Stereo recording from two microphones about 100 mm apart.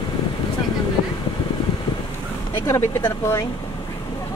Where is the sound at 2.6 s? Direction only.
25° left (ahead or behind).